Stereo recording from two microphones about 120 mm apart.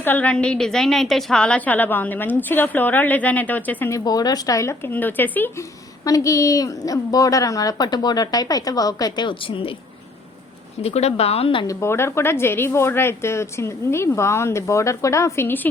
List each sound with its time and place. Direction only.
0.0 s a woman's voice: 15° left (ahead or behind)
3.9 s a woman's voice: 30° left (ahead or behind); by 5.6 s 15° left (ahead or behind)
6.1 s a woman's voice: 25° left (ahead or behind); by 9.7 s 45° left (ahead or behind)
10.8 s a woman's voice: 60° left (ahead or behind)
11.6 s a woman's voice: 25° left (ahead or behind)